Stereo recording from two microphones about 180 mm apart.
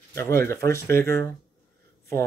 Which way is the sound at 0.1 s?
15° left (ahead or behind).